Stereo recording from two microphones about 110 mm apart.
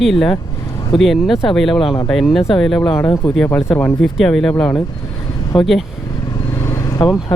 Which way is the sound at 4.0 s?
5° left (ahead or behind).